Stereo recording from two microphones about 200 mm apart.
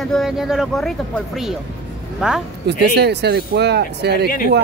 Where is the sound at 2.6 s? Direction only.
55° right (ahead or behind).